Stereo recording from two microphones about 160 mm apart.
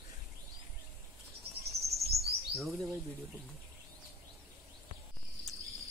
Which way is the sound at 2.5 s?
Centre (ahead or behind).